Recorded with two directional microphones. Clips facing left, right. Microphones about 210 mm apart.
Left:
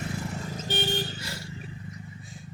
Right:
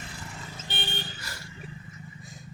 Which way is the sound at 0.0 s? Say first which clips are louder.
Left 9 dB; 40° left (ahead or behind).